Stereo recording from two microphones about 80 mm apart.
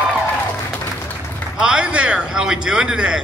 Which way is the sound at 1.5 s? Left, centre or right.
Centre.